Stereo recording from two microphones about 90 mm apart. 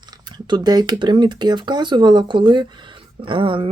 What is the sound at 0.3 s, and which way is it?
Speech, 55° right (ahead or behind).